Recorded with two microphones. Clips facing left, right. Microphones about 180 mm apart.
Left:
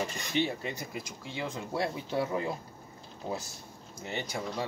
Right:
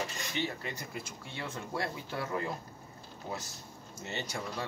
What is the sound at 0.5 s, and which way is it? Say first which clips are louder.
Speech: left 4 dB; 20° left (ahead or behind).